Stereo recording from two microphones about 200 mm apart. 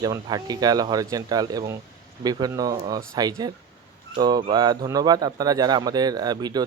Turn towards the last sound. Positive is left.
turn(degrees=-20)  # may be behind; listen again after turning